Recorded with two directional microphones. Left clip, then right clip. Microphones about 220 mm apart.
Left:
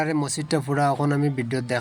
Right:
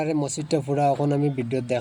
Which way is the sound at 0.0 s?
20° left (ahead or behind).